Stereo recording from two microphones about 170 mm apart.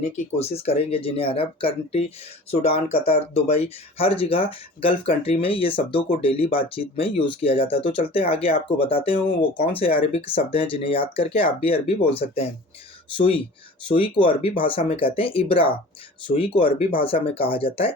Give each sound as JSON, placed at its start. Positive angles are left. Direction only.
{"t": 0.3, "sound": "speech", "side_deg": 35}